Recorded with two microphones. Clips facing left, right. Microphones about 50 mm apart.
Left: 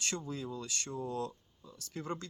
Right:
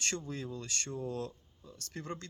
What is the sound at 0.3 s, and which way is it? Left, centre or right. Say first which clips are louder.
Speech: even; right.